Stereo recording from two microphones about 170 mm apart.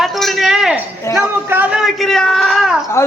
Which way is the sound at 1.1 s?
15° left (ahead or behind).